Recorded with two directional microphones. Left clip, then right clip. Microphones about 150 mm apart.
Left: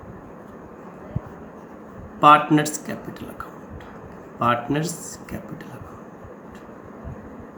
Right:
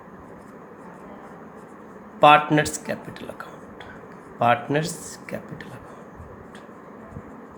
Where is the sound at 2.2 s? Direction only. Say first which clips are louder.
Left 1 dB; 35° right (ahead or behind).